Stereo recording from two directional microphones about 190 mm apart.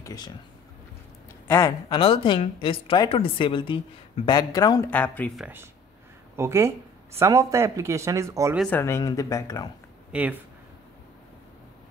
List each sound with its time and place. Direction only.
0.0 s speech: 20° left (ahead or behind)
1.5 s speech: 15° left (ahead or behind)
2.0 s a woman's voice: 25° left (ahead or behind)
4.9 s speech: 10° left (ahead or behind)
5.4 s speech: 10° right (ahead or behind)
8.5 s speech: 5° left (ahead or behind)
10.1 s speech: 5° right (ahead or behind)